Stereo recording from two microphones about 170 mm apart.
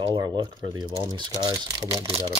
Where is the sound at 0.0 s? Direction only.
25° right (ahead or behind).